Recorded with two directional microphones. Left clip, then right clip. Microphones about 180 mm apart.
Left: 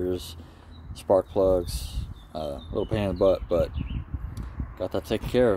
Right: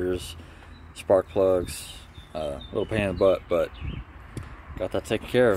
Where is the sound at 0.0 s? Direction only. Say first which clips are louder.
Right 1 dB; 15° left (ahead or behind).